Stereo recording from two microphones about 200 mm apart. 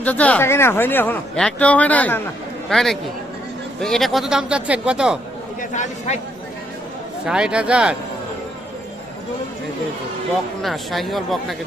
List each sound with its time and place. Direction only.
0.0 s speech: 5° left (ahead or behind)
5.7 s speech: 35° left (ahead or behind)
7.3 s speech: 5° right (ahead or behind)
10.6 s speech: centre (ahead or behind)